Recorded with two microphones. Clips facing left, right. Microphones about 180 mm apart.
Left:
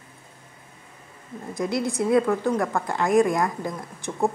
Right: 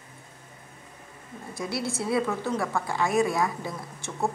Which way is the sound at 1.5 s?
20° left (ahead or behind).